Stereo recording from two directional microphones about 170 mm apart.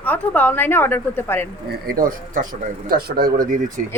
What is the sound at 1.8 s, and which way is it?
Speech, 60° right (ahead or behind).